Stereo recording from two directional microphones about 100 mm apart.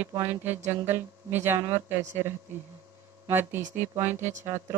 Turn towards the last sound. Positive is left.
turn(degrees=-25)  # may be behind; listen again after turning